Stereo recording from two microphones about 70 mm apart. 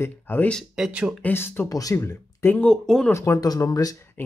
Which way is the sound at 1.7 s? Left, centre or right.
Left.